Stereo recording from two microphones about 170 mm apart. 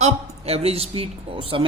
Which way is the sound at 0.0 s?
40° right (ahead or behind).